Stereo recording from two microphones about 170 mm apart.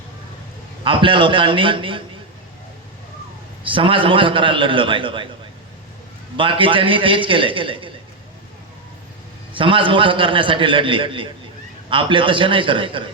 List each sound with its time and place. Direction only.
0.9 s a man's voice: 30° right (ahead or behind)
3.6 s a man's voice: 30° right (ahead or behind)
6.3 s a man's voice: 30° right (ahead or behind)
9.6 s a man's voice: 30° right (ahead or behind)